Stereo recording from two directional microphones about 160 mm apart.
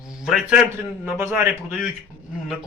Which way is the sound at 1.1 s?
15° right (ahead or behind).